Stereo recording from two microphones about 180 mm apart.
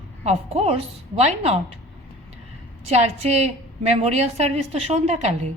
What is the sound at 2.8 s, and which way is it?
A woman's voice, 35° right (ahead or behind).